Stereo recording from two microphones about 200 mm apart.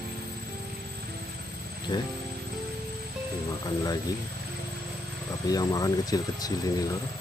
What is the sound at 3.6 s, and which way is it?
Speech, 20° left (ahead or behind).